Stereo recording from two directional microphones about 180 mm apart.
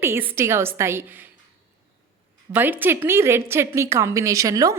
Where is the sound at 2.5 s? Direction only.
10° right (ahead or behind).